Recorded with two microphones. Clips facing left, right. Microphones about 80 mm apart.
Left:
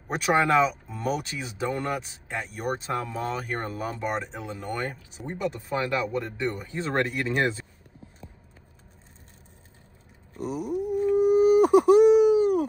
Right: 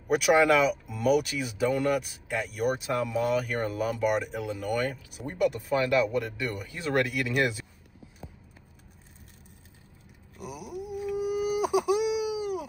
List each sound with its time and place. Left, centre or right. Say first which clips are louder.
0.1 s speech: right 1 dB; left
10.3 s a sound: left 9 dB; centre
11.1 s wail: left 10 dB; left